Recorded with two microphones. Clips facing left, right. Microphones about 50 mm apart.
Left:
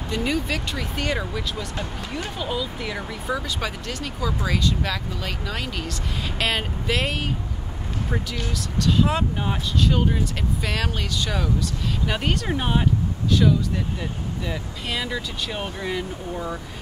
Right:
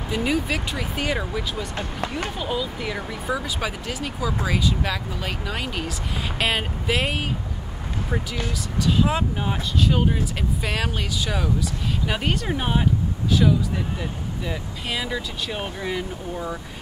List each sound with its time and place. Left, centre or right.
0.1 s speech: centre
1.8 s speech: right
2.3 s speech: centre
8.8 s speech: centre